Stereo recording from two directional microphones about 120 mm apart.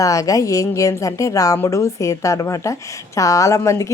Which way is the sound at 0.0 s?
30° left (ahead or behind).